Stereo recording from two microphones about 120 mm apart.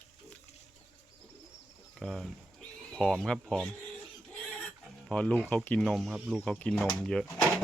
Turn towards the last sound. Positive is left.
turn(degrees=5)  # may be behind; listen again after turning